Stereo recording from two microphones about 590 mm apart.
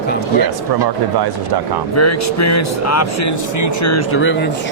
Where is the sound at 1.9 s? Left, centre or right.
Left.